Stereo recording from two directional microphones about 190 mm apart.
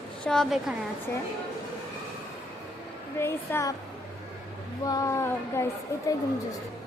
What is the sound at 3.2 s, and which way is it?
Speech, 15° left (ahead or behind).